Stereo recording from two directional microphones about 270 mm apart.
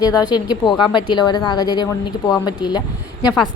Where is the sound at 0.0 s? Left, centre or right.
Centre.